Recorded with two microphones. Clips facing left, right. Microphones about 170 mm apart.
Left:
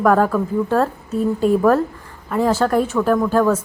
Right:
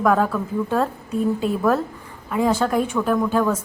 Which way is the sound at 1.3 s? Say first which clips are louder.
Left 7 dB; 40° left (ahead or behind).